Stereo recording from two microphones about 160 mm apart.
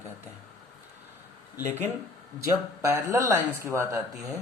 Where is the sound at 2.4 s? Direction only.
15° right (ahead or behind).